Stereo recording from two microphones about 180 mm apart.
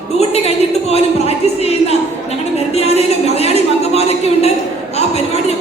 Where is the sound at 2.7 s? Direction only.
35° left (ahead or behind).